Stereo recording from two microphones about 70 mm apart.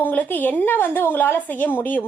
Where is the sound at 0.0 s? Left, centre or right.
Left.